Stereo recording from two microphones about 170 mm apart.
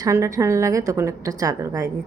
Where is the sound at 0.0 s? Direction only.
15° right (ahead or behind).